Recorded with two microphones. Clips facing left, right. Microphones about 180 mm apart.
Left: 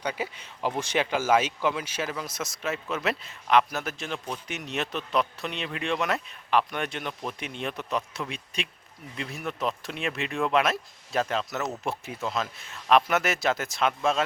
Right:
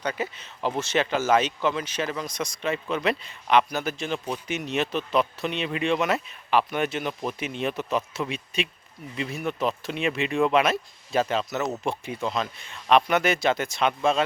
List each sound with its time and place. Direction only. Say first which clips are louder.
0.0 s speech: right 2 dB; 10° left (ahead or behind)